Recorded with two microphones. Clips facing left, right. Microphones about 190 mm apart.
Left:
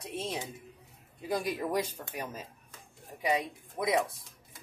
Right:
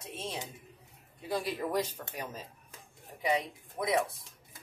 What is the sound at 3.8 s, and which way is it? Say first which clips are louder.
Speech: left 2 dB; 15° left (ahead or behind).